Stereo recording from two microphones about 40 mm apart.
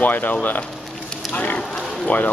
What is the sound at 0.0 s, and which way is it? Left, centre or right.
Speech, left.